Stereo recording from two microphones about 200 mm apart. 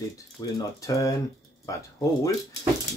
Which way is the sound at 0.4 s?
15° left (ahead or behind).